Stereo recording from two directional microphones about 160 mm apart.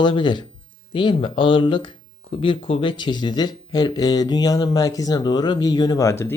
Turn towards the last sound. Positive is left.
turn(degrees=15)  # may be behind; listen again after turning